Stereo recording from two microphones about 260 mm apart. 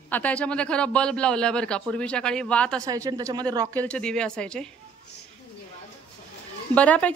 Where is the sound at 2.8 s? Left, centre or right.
Centre.